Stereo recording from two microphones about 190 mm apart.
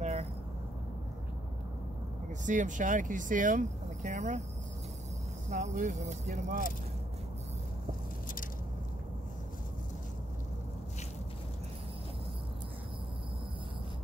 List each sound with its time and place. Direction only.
0.0 s vehicle: 35° right (ahead or behind)
2.4 s speech: 40° right (ahead or behind)
5.5 s speech: 40° right (ahead or behind)